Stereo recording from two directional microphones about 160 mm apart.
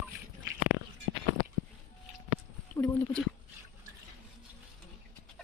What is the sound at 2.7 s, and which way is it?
Speech, 10° left (ahead or behind).